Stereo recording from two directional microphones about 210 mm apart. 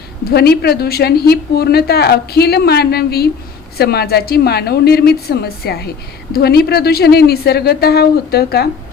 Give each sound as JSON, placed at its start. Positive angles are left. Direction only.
{"t": 0.3, "sound": "a woman's voice", "side_deg": 50}